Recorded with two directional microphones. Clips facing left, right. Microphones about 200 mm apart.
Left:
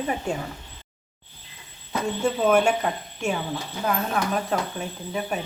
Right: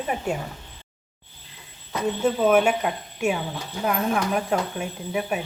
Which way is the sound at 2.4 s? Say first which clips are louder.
Right 1 dB; 5° right (ahead or behind).